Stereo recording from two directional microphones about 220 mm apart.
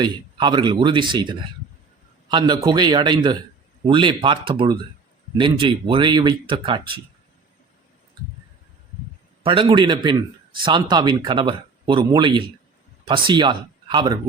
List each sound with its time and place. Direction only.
0.0 s a man's voice: 20° right (ahead or behind)
9.4 s a man's voice: 25° right (ahead or behind)